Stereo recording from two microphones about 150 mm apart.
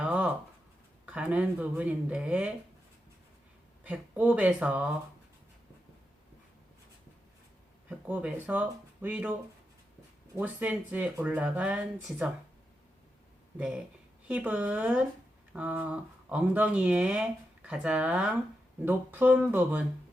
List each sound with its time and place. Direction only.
0.0 s a sound: 5° right (ahead or behind)
1.0 s speech: 10° right (ahead or behind)
3.8 s speech: 10° right (ahead or behind)
7.9 s speech: 10° right (ahead or behind)
10.3 s speech: 10° right (ahead or behind)
13.6 s speech: 5° right (ahead or behind)